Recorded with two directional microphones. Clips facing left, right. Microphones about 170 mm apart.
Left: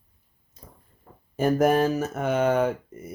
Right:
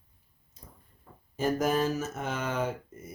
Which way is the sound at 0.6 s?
90° left.